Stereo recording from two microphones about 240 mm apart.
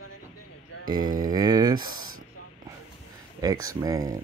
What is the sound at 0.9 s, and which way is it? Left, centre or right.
Speech, centre.